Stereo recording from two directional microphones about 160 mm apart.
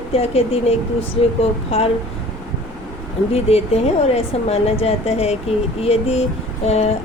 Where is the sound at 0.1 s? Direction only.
40° left (ahead or behind).